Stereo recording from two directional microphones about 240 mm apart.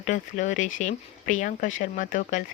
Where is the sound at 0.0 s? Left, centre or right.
Left.